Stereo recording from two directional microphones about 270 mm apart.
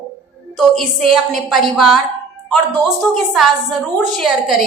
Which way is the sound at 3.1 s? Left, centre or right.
Centre.